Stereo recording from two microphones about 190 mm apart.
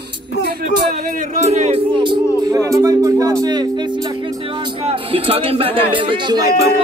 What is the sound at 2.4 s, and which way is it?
Speech, 15° right (ahead or behind).